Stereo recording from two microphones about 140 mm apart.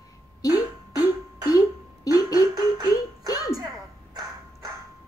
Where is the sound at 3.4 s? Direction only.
25° right (ahead or behind).